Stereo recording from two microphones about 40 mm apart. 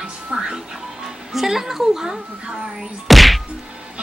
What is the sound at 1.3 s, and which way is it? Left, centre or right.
Speech, centre.